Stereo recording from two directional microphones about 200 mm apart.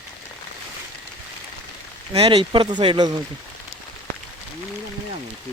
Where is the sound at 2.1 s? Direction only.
30° right (ahead or behind).